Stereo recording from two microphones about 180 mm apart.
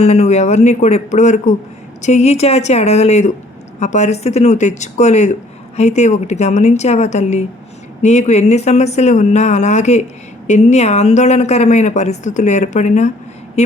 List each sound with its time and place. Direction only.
0.0 s speech: 40° left (ahead or behind)